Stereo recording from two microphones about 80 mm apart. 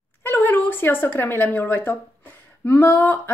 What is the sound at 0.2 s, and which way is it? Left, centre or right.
A woman's voice, left.